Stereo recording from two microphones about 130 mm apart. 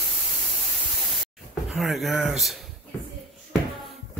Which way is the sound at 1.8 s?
Centre (ahead or behind).